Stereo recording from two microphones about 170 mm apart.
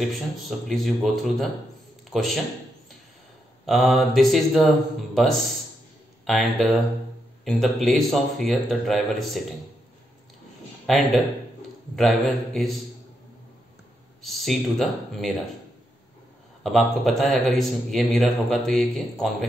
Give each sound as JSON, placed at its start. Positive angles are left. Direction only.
{"t": 0.0, "sound": "a man's voice", "side_deg": 0}
{"t": 3.6, "sound": "a man's voice", "side_deg": 0}
{"t": 10.9, "sound": "a man's voice", "side_deg": 0}
{"t": 14.2, "sound": "a man's voice", "side_deg": 0}
{"t": 16.6, "sound": "a man's voice", "side_deg": 0}